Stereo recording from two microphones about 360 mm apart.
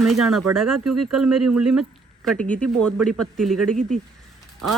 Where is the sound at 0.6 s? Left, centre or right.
Right.